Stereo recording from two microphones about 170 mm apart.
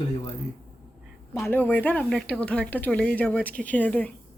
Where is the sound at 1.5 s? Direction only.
10° left (ahead or behind).